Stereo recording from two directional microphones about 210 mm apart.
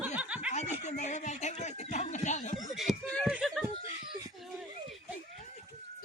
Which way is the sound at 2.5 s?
Centre (ahead or behind).